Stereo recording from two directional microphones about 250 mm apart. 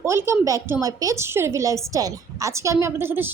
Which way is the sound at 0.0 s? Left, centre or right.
Centre.